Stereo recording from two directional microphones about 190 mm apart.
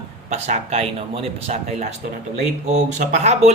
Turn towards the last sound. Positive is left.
turn(degrees=-35)  # may be behind; listen again after turning